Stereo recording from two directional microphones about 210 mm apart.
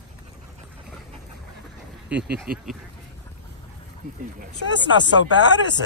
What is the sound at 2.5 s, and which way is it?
Speech, 45° right (ahead or behind).